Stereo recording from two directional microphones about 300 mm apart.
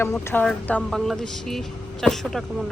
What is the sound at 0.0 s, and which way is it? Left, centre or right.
Speech, centre.